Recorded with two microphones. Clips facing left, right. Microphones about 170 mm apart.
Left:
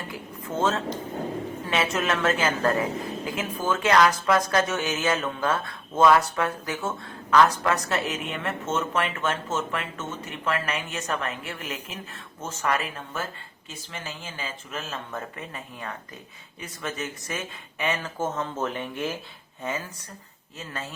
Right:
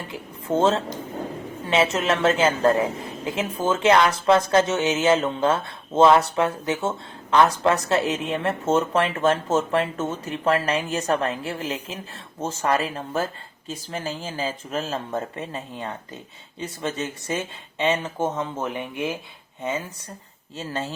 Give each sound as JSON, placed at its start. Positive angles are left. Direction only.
{"t": 0.1, "sound": "a woman's voice", "side_deg": -30}
{"t": 20.6, "sound": "a woman's voice", "side_deg": -30}